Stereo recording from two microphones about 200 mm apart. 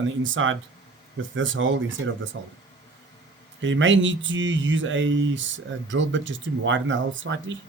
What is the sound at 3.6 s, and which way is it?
Speech, 70° right (ahead or behind).